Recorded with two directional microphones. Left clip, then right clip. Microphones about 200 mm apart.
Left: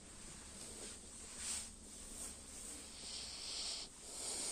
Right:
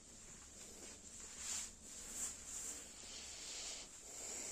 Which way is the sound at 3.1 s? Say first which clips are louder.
Left 5 dB; 25° right (ahead or behind).